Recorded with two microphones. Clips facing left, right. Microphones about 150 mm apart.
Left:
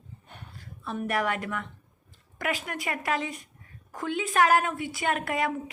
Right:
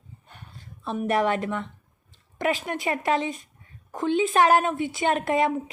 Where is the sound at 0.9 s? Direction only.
25° right (ahead or behind).